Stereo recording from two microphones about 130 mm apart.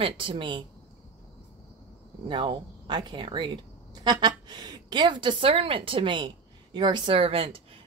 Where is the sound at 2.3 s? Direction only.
35° right (ahead or behind).